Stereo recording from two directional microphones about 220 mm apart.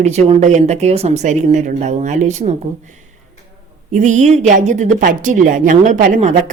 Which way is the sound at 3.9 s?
35° right (ahead or behind).